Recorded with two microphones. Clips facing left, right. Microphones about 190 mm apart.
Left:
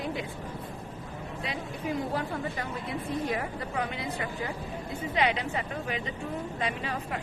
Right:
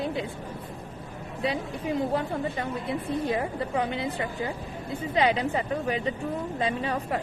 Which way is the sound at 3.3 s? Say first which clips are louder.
Right 5 dB; 30° right (ahead or behind).